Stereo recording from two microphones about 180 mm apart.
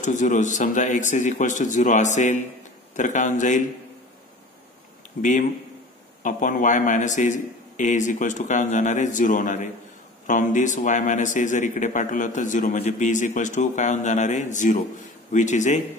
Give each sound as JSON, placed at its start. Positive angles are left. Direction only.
{"t": 0.0, "sound": "a man's voice", "side_deg": 45}
{"t": 6.2, "sound": "a man's voice", "side_deg": 45}